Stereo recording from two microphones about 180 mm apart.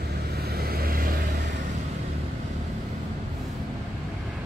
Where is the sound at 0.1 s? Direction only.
60° right (ahead or behind).